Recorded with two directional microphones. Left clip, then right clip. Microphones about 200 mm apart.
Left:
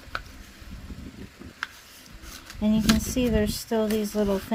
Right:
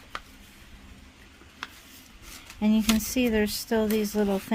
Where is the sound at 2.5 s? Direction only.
30° right (ahead or behind).